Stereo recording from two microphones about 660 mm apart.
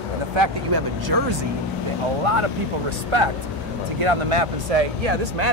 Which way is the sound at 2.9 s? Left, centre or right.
Right.